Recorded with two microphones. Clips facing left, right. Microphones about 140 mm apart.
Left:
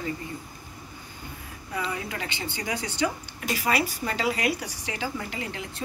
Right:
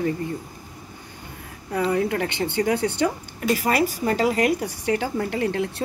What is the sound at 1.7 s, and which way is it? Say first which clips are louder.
A woman's voice: right 10 dB; 55° right (ahead or behind).